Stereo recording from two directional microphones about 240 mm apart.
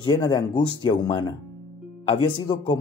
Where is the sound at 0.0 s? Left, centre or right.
Centre.